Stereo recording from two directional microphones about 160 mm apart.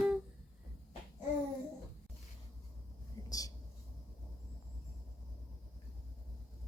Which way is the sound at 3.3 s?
20° left (ahead or behind).